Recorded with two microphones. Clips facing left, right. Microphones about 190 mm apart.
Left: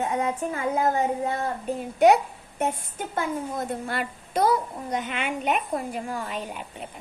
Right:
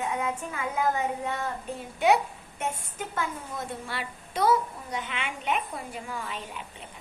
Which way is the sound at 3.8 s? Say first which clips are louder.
Left 6 dB; 50° left (ahead or behind).